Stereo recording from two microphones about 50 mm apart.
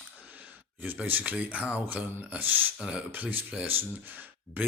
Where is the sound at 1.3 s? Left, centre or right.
Right.